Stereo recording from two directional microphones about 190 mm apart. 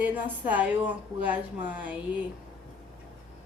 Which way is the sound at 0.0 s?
10° right (ahead or behind).